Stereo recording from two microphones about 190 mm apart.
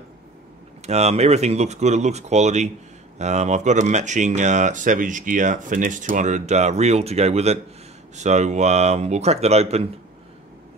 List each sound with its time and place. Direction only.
0.8 s speech: 35° right (ahead or behind)